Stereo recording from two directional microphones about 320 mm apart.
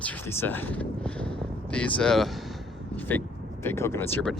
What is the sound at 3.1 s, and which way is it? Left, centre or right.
Vehicle, centre.